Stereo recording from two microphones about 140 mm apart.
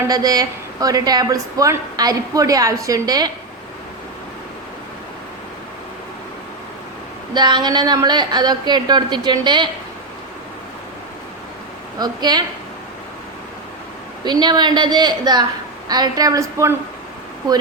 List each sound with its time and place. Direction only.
0.1 s a woman's voice: 25° right (ahead or behind)
7.3 s a woman's voice: 30° right (ahead or behind)
11.9 s a woman's voice: 30° right (ahead or behind)
14.3 s a woman's voice: 30° right (ahead or behind)